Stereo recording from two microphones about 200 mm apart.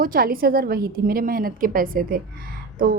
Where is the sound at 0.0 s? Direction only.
45° right (ahead or behind).